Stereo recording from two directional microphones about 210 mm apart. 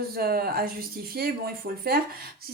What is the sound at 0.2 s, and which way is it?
Speech, 45° right (ahead or behind).